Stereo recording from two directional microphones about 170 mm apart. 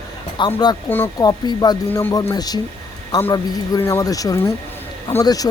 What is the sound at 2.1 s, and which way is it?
Speech, 20° left (ahead or behind).